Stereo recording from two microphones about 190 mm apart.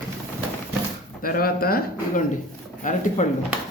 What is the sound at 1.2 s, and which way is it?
Speech, 50° left (ahead or behind).